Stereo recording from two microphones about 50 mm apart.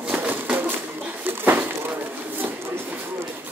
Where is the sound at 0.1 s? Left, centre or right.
Right.